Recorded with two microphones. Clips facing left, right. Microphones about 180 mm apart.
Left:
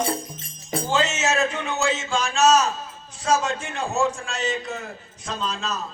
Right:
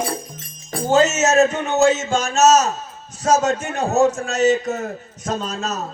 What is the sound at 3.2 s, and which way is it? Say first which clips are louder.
A man's voice: right 5 dB; 45° right (ahead or behind).